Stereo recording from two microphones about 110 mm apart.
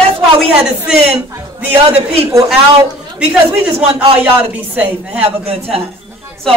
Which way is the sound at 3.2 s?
15° right (ahead or behind).